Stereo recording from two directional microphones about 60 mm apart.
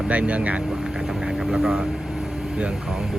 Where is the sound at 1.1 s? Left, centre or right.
Centre.